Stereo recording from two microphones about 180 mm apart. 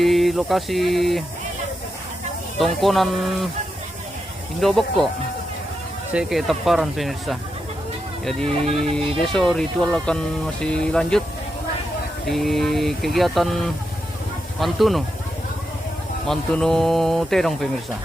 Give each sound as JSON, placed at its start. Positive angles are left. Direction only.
{"t": 0.0, "sound": "speech", "side_deg": 0}
{"t": 2.6, "sound": "speech", "side_deg": 0}
{"t": 4.6, "sound": "speech", "side_deg": 0}
{"t": 6.1, "sound": "speech", "side_deg": 0}
{"t": 12.2, "sound": "speech", "side_deg": 0}
{"t": 14.6, "sound": "speech", "side_deg": 0}
{"t": 16.2, "sound": "speech", "side_deg": 5}